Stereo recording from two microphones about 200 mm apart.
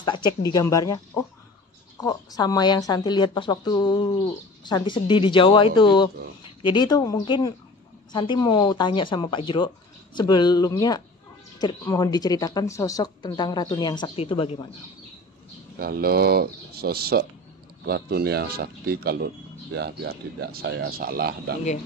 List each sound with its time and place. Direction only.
0.0 s speech: 20° left (ahead or behind)
15.8 s speech: 50° right (ahead or behind)